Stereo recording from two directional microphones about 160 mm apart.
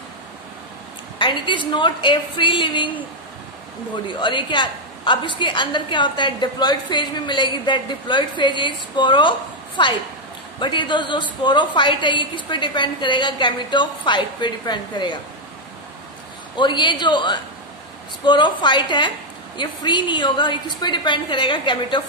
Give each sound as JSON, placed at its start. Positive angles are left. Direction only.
{"t": 1.1, "sound": "a woman's voice", "side_deg": 30}
{"t": 4.2, "sound": "a woman's voice", "side_deg": 30}
{"t": 16.5, "sound": "a woman's voice", "side_deg": 30}